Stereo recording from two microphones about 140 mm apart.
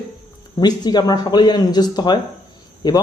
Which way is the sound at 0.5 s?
30° left (ahead or behind).